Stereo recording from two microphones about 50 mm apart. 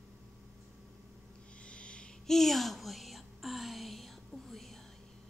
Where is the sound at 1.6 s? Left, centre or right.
Left.